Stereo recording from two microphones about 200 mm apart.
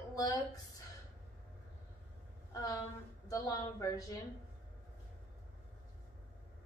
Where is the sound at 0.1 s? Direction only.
15° left (ahead or behind).